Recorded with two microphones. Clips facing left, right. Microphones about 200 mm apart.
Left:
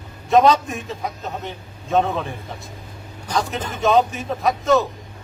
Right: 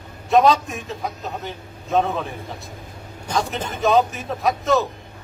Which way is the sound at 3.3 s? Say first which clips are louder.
Even; centre (ahead or behind).